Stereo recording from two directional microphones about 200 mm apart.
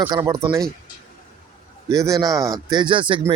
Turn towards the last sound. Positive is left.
turn(degrees=-25)  # may be behind; listen again after turning